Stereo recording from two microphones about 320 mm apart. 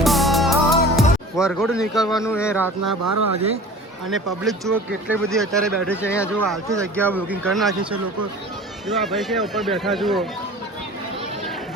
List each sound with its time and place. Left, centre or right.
0.0 s music: centre
1.4 s speech: centre
2.8 s speech: right
4.1 s speech: centre
8.9 s speech: centre